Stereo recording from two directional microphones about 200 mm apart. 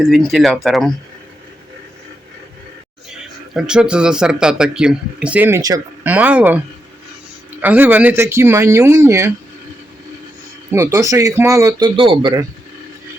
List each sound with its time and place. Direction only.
0.0 s speech: centre (ahead or behind)
3.5 s speech: 5° right (ahead or behind)
7.6 s speech: 10° right (ahead or behind)
10.7 s speech: 15° right (ahead or behind)
11.9 s speech: 25° right (ahead or behind)